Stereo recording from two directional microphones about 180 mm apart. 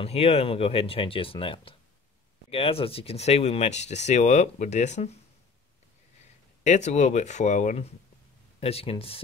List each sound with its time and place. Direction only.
0.0 s speech: 35° left (ahead or behind)
6.6 s speech: 40° left (ahead or behind)